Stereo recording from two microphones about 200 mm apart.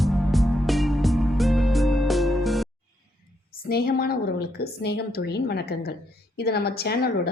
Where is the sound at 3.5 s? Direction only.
50° left (ahead or behind).